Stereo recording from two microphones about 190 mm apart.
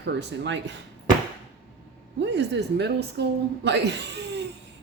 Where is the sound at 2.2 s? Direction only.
65° right (ahead or behind).